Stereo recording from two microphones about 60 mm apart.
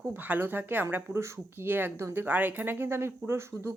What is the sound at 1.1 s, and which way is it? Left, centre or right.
Speech, right.